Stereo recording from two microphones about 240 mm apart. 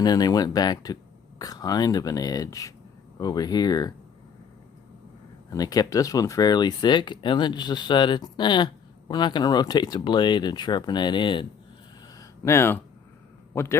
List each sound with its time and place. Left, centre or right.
0.0 s speech: centre
5.5 s speech: centre
12.1 s a sound: centre
13.5 s a man's voice: centre